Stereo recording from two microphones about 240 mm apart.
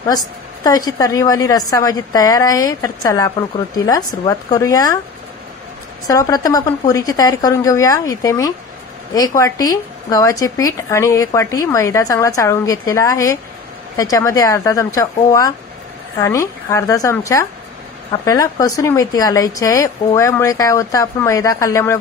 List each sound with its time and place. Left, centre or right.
0.9 s a woman's voice: centre
6.0 s a woman's voice: centre